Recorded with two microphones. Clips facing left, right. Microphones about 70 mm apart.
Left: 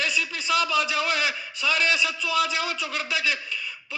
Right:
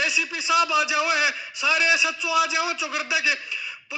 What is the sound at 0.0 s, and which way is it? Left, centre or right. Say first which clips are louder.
A man's voice: right 1 dB; centre.